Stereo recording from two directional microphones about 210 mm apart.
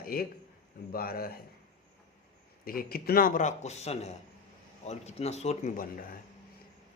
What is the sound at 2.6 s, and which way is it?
A man's voice, 45° left (ahead or behind).